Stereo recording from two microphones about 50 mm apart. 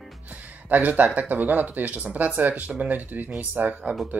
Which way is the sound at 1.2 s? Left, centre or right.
Right.